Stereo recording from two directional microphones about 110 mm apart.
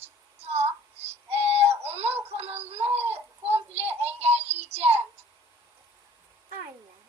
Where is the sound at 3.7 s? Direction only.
70° right (ahead or behind).